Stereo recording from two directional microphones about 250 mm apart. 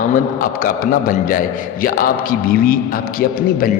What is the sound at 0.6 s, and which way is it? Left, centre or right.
A man's voice, left.